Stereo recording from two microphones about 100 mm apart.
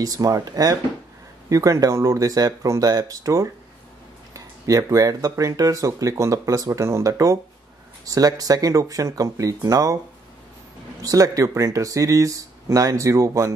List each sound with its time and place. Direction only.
0.0 s speech: 35° right (ahead or behind)
11.0 s speech: 35° right (ahead or behind)